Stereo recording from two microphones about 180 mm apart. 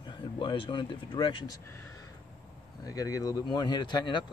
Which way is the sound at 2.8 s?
20° left (ahead or behind).